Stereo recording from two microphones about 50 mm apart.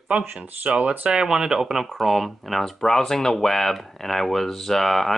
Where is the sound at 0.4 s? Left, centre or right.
Right.